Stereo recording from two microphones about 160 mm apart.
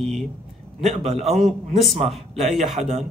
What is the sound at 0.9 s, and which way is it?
Speech, 45° right (ahead or behind).